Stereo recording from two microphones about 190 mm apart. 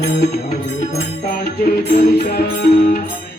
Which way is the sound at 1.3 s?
45° left (ahead or behind).